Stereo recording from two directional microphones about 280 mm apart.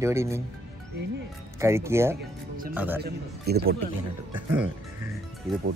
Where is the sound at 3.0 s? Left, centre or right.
Right.